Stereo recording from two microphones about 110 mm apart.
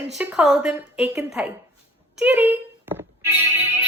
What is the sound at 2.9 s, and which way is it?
Music, 20° right (ahead or behind).